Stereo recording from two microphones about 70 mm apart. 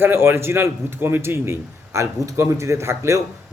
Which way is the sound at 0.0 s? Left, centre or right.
Right.